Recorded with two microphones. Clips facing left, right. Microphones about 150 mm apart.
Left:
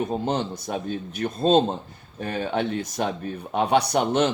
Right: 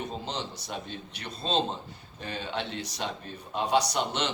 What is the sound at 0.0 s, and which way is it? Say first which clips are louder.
A man's voice: left 10 dB; 55° left (ahead or behind).